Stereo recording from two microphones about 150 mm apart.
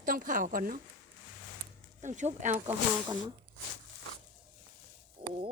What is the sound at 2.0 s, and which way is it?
Speech, 55° right (ahead or behind).